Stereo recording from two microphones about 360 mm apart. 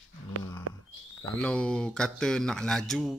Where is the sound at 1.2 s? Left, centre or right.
Centre.